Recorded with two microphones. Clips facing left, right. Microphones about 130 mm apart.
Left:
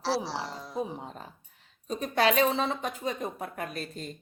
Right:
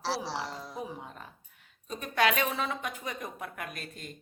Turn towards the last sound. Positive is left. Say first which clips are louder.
# left 6 dB
turn(degrees=35)  # may be behind; listen again after turning